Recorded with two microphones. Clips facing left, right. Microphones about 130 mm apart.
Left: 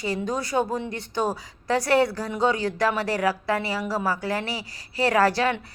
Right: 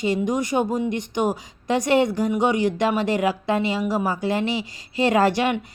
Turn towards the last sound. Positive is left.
turn(degrees=-20)  # may be behind; listen again after turning